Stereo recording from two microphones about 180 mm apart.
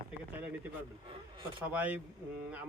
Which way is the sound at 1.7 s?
10° right (ahead or behind).